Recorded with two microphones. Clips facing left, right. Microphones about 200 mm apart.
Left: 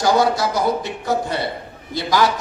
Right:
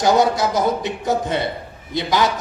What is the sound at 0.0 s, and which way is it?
Speech, 20° right (ahead or behind).